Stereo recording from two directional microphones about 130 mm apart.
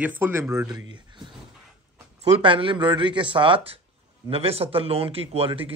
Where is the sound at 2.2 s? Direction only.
40° right (ahead or behind).